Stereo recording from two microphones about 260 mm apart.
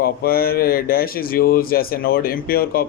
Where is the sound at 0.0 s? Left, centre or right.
Left.